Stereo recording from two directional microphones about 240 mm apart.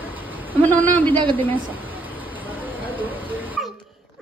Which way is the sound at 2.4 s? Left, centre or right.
Centre.